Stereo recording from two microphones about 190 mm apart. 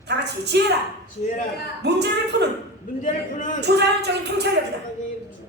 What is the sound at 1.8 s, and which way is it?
Speech, 60° right (ahead or behind).